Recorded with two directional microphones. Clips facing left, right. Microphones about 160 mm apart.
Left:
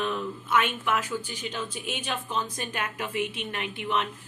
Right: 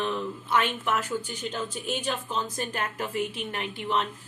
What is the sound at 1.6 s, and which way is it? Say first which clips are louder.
Speech: right 3 dB; 35° right (ahead or behind).